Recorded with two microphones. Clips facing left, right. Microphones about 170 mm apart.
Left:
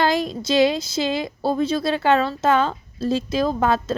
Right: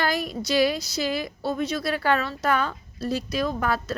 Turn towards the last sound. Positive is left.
turn(degrees=25)  # may be behind; listen again after turning